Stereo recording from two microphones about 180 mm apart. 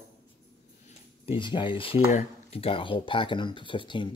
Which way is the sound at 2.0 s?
45° left (ahead or behind).